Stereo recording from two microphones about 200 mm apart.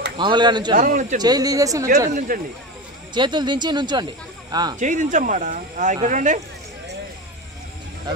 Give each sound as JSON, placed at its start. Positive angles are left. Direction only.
{"t": 0.2, "sound": "speech", "side_deg": -20}
{"t": 0.7, "sound": "speech", "side_deg": -40}
{"t": 1.2, "sound": "speech", "side_deg": -20}
{"t": 2.1, "sound": "speech", "side_deg": -45}
{"t": 3.2, "sound": "speech", "side_deg": -20}
{"t": 4.7, "sound": "speech", "side_deg": -40}